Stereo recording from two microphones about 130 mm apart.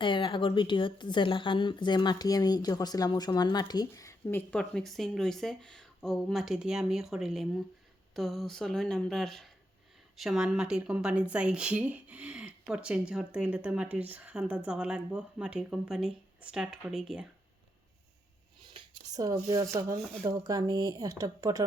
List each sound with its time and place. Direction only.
0.0 s a woman's voice: 40° left (ahead or behind); by 17.2 s 5° right (ahead or behind)
18.7 s speech: 30° right (ahead or behind)